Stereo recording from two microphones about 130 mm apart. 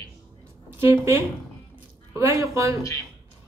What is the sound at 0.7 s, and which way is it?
Speech, 20° right (ahead or behind).